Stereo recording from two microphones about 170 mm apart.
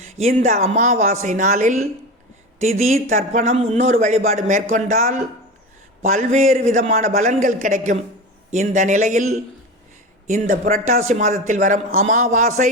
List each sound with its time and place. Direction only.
0.2 s a man's voice: 40° right (ahead or behind)